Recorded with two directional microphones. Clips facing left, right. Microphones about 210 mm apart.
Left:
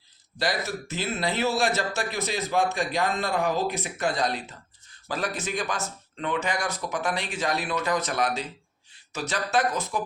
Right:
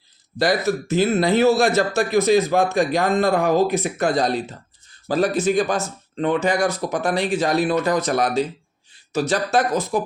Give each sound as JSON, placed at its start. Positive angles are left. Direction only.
{"t": 0.3, "sound": "speech", "side_deg": -45}